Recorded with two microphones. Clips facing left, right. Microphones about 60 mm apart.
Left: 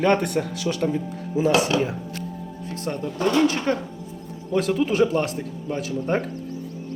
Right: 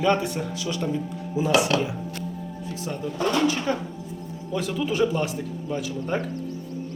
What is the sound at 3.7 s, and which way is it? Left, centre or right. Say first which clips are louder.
Speech: left 2 dB; left.